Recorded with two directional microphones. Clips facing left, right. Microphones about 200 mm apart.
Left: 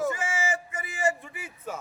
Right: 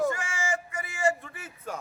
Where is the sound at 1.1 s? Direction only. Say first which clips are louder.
Right 1 dB; 10° left (ahead or behind).